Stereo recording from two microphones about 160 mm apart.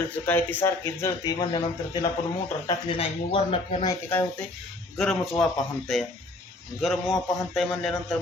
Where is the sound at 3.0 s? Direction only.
35° left (ahead or behind).